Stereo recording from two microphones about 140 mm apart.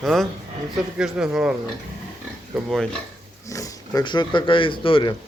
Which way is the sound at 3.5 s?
25° left (ahead or behind).